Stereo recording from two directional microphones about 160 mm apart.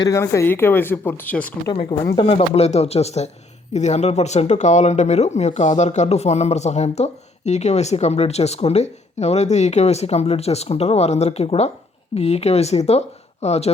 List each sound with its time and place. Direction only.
0.0 s speech: 20° left (ahead or behind)
1.7 s speech: 30° left (ahead or behind)